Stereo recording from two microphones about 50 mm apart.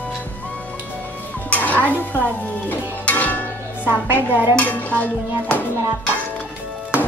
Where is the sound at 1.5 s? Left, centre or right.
Left.